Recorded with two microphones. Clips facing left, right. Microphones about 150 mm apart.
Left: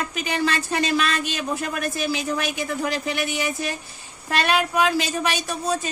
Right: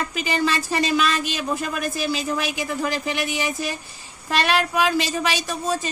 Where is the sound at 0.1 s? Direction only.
5° right (ahead or behind).